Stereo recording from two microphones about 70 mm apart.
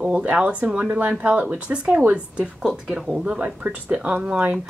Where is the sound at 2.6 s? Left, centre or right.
Centre; by 4.5 s right.